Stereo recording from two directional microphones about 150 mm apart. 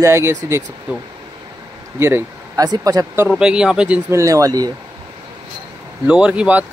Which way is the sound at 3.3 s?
5° right (ahead or behind).